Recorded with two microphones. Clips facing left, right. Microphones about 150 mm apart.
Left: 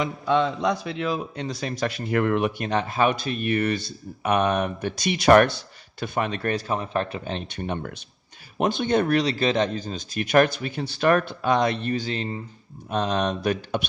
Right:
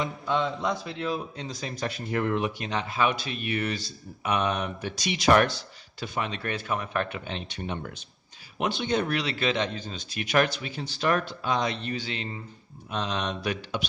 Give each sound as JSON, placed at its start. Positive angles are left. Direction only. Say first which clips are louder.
{"t": 0.0, "sound": "a man's voice", "louder": "left 5 dB", "side_deg": 85}
{"t": 8.5, "sound": "speech", "louder": "left 5 dB", "side_deg": 45}